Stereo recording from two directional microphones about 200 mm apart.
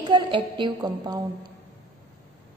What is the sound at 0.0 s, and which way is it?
A woman's voice, 25° right (ahead or behind).